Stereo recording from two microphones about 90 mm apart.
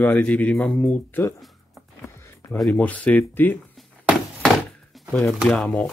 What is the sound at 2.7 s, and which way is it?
Speech, 15° left (ahead or behind).